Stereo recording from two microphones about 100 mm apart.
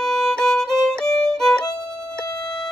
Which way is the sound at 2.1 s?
40° left (ahead or behind).